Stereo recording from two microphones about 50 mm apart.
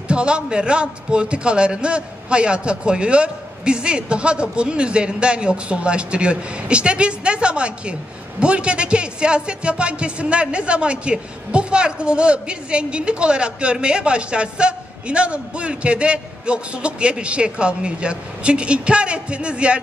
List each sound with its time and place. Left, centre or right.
0.1 s speech: centre